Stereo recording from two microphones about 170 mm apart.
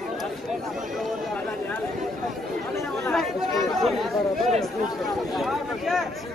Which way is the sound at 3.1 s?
Centre (ahead or behind).